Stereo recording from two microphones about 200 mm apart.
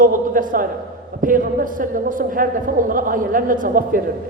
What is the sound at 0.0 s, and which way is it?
A man's voice, 40° right (ahead or behind).